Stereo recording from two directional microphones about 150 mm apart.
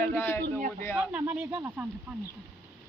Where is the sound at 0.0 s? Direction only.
15° left (ahead or behind).